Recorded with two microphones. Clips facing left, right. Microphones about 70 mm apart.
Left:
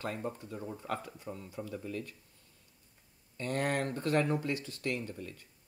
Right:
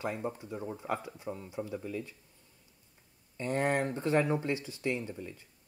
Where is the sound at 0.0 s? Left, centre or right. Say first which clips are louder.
Right 2 dB; centre.